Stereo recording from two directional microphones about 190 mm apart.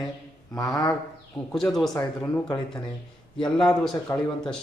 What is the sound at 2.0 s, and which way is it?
Speech, 10° left (ahead or behind).